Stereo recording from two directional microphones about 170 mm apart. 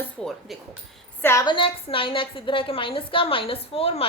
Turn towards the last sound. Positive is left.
turn(degrees=35)  # may be behind; listen again after turning